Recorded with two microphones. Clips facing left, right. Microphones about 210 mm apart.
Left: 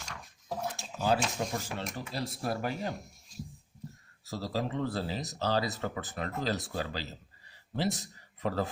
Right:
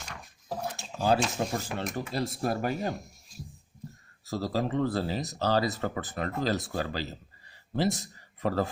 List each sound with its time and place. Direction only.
0.9 s speech: 40° right (ahead or behind)
4.3 s speech: 45° right (ahead or behind)